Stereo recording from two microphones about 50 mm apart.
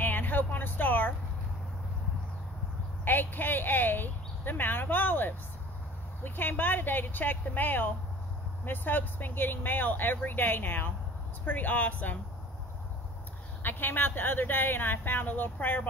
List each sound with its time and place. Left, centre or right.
0.0 s a sound: left
3.1 s speech: left
13.6 s speech: left